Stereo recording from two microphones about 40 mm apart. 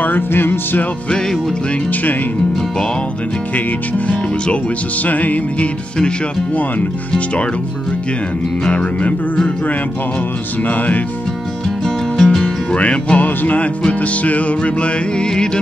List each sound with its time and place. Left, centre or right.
0.0 s music: left
5.0 s music: left
8.6 s music: left
12.2 s music: centre
12.7 s music: left
13.2 s music: left